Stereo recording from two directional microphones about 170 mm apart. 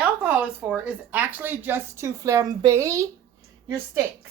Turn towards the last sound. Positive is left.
turn(degrees=-15)  # may be behind; listen again after turning